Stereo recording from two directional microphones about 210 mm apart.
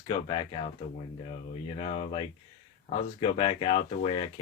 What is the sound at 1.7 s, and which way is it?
Speech, 25° left (ahead or behind).